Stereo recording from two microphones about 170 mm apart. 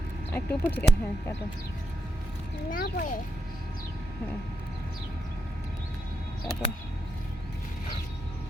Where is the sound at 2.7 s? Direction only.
55° left (ahead or behind).